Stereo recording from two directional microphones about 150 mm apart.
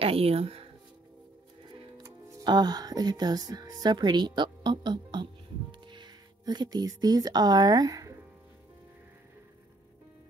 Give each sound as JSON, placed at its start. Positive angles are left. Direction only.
{"t": 0.0, "sound": "speech", "side_deg": -40}
{"t": 2.0, "sound": "speech", "side_deg": -25}